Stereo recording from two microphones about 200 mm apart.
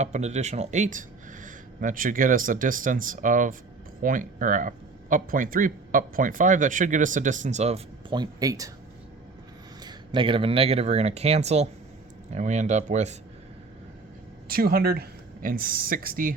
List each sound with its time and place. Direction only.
0.0 s speech: 35° right (ahead or behind)
8.1 s speech: 20° right (ahead or behind)
9.8 s speech: 25° right (ahead or behind)
14.4 s speech: 50° right (ahead or behind)